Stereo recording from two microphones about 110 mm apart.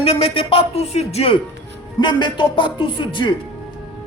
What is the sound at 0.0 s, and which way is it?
Speech, 55° left (ahead or behind).